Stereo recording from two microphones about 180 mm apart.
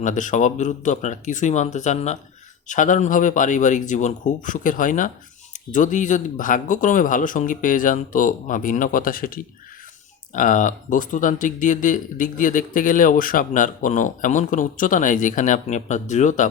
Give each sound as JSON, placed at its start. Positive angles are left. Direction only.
{"t": 0.0, "sound": "speech", "side_deg": 45}